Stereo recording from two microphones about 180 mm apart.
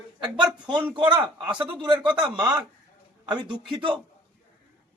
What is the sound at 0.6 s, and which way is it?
A man's voice, 25° right (ahead or behind).